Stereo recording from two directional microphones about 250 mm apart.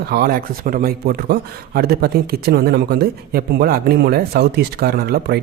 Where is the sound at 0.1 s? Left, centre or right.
Right.